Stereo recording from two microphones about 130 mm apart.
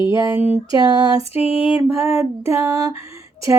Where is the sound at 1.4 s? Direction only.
45° left (ahead or behind).